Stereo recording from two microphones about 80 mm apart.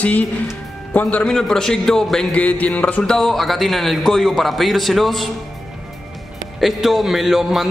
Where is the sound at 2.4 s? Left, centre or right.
Centre.